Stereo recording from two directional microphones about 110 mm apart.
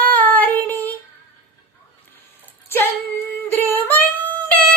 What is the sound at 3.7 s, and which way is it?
Yodeling, 20° left (ahead or behind).